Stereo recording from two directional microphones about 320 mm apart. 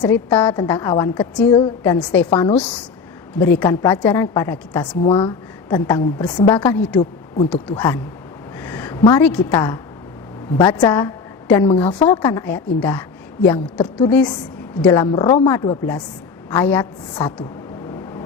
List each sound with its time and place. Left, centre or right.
0.0 s a woman's voice: centre
2.3 s a woman's voice: centre
2.6 s a woman's voice: centre
5.0 s a woman's voice: centre
8.6 s a sound: centre
9.0 s a woman's voice: centre